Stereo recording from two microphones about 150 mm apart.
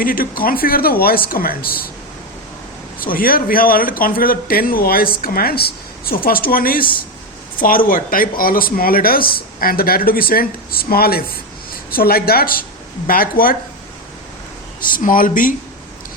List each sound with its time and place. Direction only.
0.0 s speech: 70° left (ahead or behind)
3.0 s a woman's voice: 70° left (ahead or behind)
13.1 s speech: 70° left (ahead or behind)
14.9 s speech: 65° left (ahead or behind)